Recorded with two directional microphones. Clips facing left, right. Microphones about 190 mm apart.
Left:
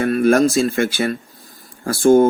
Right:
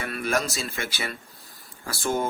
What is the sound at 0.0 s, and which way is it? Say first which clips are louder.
Speech: left 13 dB; 50° left (ahead or behind).